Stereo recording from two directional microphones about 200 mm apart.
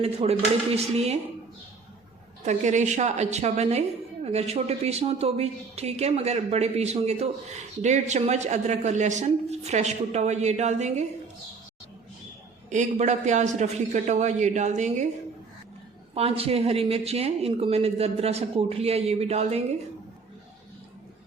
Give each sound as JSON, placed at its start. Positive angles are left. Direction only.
{"t": 0.0, "sound": "a woman's voice", "side_deg": -30}
{"t": 2.4, "sound": "a woman's voice", "side_deg": -35}
{"t": 12.7, "sound": "a woman's voice", "side_deg": -35}
{"t": 16.1, "sound": "a woman's voice", "side_deg": -30}